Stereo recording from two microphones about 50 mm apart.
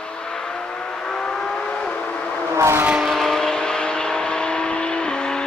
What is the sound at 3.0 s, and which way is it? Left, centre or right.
Vehicle, centre.